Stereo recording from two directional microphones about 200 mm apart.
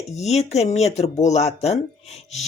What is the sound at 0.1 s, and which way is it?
Speech, 35° left (ahead or behind).